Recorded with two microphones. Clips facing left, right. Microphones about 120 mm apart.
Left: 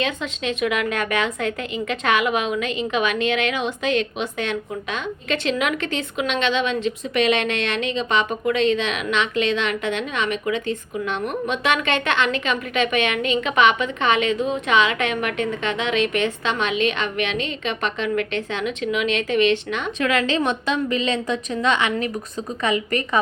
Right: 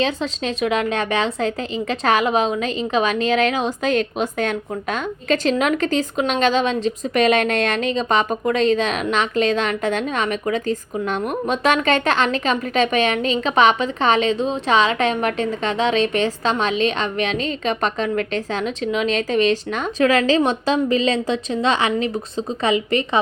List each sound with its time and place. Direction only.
0.0 s a woman's voice: 30° right (ahead or behind)